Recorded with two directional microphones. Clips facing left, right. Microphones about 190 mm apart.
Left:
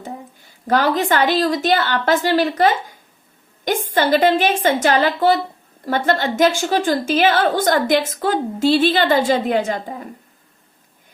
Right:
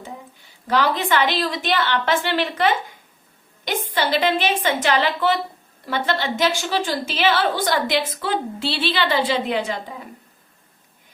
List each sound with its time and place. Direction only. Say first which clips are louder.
0.0 s a woman's voice: left 4 dB; 45° left (ahead or behind)